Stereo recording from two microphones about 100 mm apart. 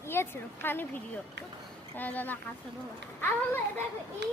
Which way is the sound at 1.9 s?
15° left (ahead or behind).